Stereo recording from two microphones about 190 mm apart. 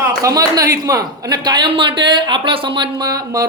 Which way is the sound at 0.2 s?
20° right (ahead or behind).